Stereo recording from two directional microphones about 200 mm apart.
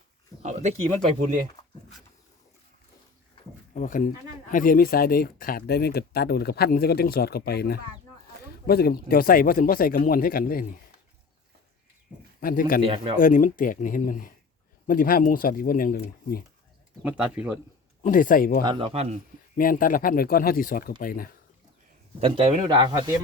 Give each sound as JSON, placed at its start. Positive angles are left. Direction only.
{"t": 3.8, "sound": "speech", "side_deg": 40}
{"t": 12.4, "sound": "speech", "side_deg": 45}
{"t": 12.8, "sound": "speech", "side_deg": -30}
{"t": 13.1, "sound": "speech", "side_deg": 45}
{"t": 17.0, "sound": "speech", "side_deg": -5}
{"t": 18.0, "sound": "speech", "side_deg": 45}
{"t": 18.6, "sound": "speech", "side_deg": -25}
{"t": 19.5, "sound": "speech", "side_deg": 45}
{"t": 22.2, "sound": "speech", "side_deg": -25}